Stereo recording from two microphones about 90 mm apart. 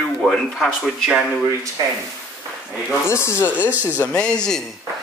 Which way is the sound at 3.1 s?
30° left (ahead or behind).